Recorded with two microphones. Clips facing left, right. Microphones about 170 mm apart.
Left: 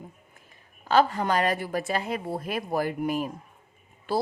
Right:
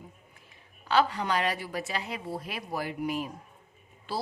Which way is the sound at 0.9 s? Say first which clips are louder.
Left 4 dB; 45° left (ahead or behind).